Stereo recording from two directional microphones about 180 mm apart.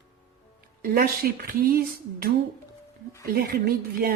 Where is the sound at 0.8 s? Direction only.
55° right (ahead or behind).